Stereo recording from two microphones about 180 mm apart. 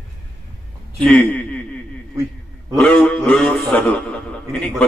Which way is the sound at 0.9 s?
5° left (ahead or behind).